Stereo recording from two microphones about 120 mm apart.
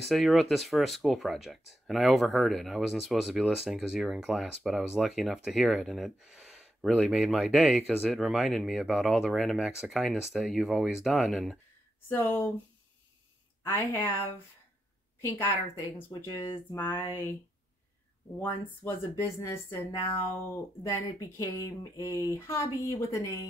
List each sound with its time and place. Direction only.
0.0 s speech: centre (ahead or behind)
12.1 s a sound: 15° left (ahead or behind)
13.7 s speech: 20° left (ahead or behind)
15.1 s a woman's voice: 20° left (ahead or behind)
16.7 s a sound: 20° left (ahead or behind)
18.4 s speech: 20° left (ahead or behind)